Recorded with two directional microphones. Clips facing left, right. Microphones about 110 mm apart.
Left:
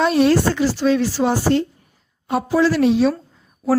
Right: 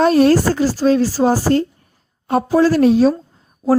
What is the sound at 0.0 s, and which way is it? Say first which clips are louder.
A woman's voice: right 3 dB; 45° right (ahead or behind).